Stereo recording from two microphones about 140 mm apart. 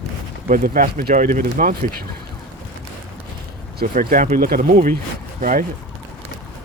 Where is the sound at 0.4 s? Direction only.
80° right.